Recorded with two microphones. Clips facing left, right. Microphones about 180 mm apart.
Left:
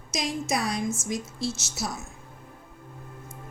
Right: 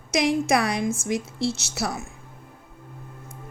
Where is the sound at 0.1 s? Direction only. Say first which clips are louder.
Right 8 dB; 60° right (ahead or behind).